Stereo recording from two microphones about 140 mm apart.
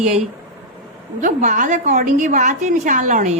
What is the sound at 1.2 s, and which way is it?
A woman's voice, 65° right (ahead or behind).